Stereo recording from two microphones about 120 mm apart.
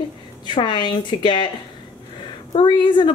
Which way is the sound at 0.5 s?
40° left (ahead or behind).